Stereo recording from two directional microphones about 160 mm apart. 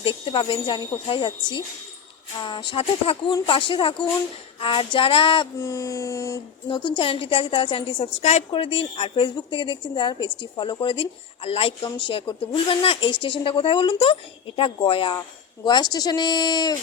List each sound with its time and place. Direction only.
0.0 s a woman's voice: 35° left (ahead or behind)
5.5 s speech: 20° left (ahead or behind)
6.7 s a woman's voice: 30° left (ahead or behind)